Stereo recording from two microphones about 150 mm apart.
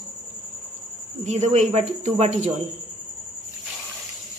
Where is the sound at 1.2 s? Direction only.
50° right (ahead or behind).